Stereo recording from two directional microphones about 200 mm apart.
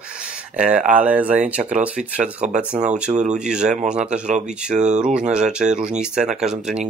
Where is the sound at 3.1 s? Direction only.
35° right (ahead or behind).